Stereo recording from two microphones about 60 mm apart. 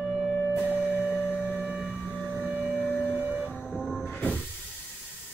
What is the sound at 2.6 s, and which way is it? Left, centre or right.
Civil defense siren, centre.